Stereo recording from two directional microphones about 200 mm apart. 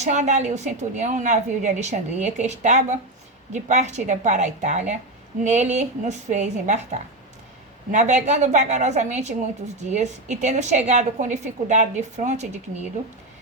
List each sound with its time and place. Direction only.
0.0 s a woman's voice: 35° right (ahead or behind)
7.9 s a woman's voice: 35° right (ahead or behind)